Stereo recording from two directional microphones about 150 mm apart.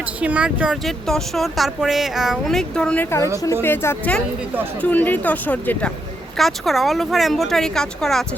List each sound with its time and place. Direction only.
0.0 s speech: 10° right (ahead or behind)